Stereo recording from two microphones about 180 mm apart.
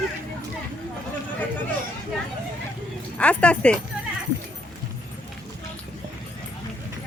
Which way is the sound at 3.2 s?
5° left (ahead or behind).